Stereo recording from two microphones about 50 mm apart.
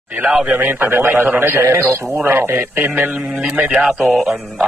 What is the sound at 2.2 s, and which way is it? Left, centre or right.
Speech, right.